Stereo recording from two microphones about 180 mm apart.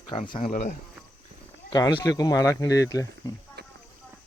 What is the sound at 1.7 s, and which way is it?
Speech, 20° left (ahead or behind).